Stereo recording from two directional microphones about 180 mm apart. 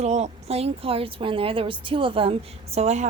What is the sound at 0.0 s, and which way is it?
A woman's voice, 40° right (ahead or behind).